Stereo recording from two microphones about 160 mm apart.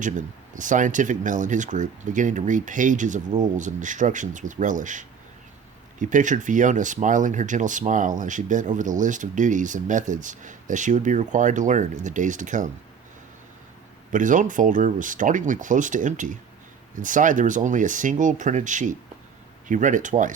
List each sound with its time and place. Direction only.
0.0 s speech: 55° right (ahead or behind)
14.1 s speech: 55° right (ahead or behind)